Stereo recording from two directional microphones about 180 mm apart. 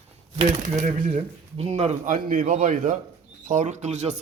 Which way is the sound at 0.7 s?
40° right (ahead or behind).